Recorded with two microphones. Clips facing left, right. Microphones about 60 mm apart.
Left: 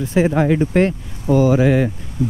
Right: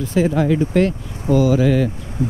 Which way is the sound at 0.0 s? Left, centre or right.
Left.